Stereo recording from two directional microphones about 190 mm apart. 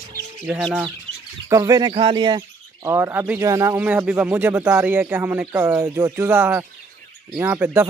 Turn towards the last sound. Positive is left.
turn(degrees=-10)  # may be behind; listen again after turning